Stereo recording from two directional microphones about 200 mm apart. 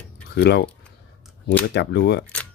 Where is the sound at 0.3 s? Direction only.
55° left (ahead or behind).